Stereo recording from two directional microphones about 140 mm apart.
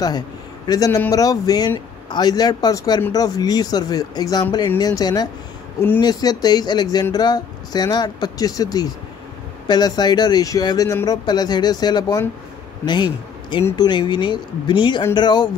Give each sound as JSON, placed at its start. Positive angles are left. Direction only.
{"t": 0.7, "sound": "a man's voice", "side_deg": 25}